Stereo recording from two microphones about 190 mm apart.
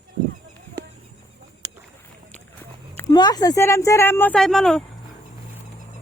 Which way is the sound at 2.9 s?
20° left (ahead or behind).